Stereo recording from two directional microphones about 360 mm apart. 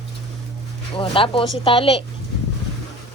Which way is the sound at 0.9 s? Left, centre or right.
Centre.